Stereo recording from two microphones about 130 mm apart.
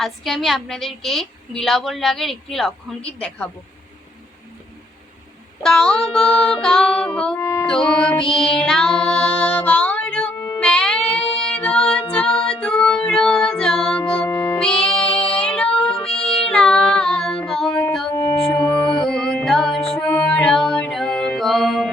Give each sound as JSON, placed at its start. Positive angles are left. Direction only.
{"t": 0.0, "sound": "a woman's voice", "side_deg": 0}
{"t": 5.6, "sound": "a woman's voice", "side_deg": 5}
{"t": 6.1, "sound": "music", "side_deg": 5}
{"t": 7.7, "sound": "a woman's voice", "side_deg": 5}
{"t": 8.4, "sound": "female singing", "side_deg": 5}
{"t": 10.6, "sound": "child singing", "side_deg": 5}
{"t": 12.1, "sound": "music", "side_deg": 10}
{"t": 14.3, "sound": "music", "side_deg": 20}
{"t": 14.8, "sound": "child singing", "side_deg": 5}
{"t": 18.3, "sound": "music", "side_deg": 5}